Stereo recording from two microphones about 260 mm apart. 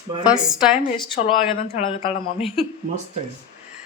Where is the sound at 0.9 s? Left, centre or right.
Centre.